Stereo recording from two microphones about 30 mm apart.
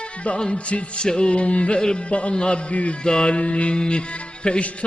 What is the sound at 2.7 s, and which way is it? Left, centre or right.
Music, left.